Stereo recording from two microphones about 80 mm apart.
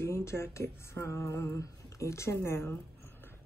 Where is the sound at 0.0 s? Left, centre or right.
Left.